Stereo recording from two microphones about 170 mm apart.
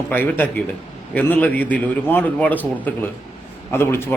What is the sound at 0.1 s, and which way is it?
A man's voice, 10° left (ahead or behind).